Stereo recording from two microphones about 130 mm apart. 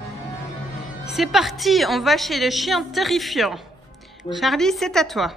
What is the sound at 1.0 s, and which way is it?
A woman's voice, centre (ahead or behind).